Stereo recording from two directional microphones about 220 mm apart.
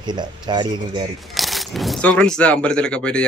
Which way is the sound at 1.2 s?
Centre (ahead or behind).